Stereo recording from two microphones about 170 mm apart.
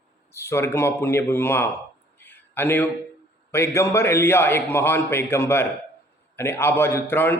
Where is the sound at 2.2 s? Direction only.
10° left (ahead or behind).